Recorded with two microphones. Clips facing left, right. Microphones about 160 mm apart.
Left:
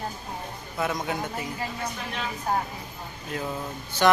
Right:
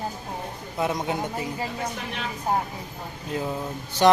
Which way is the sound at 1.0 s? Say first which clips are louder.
Right 2 dB; 25° right (ahead or behind).